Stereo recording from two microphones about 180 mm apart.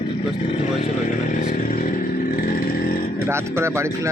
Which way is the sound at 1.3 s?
50° left (ahead or behind).